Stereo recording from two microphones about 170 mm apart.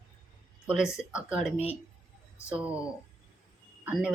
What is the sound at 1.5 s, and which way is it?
Speech, 35° left (ahead or behind).